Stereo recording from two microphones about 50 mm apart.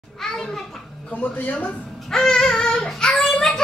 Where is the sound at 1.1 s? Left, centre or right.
Left.